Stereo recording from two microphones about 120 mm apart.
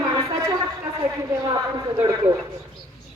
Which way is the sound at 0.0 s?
30° right (ahead or behind).